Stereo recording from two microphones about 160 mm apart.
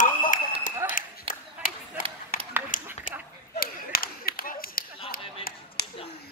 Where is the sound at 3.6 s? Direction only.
70° left (ahead or behind).